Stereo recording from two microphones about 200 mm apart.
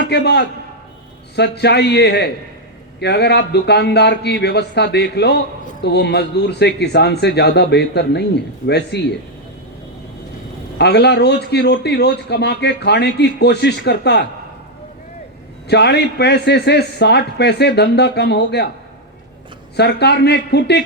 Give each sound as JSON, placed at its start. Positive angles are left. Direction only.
{"t": 0.0, "sound": "a man's voice", "side_deg": 55}
{"t": 10.8, "sound": "a man's voice", "side_deg": 55}
{"t": 15.6, "sound": "a man's voice", "side_deg": 55}
{"t": 19.7, "sound": "a man's voice", "side_deg": 55}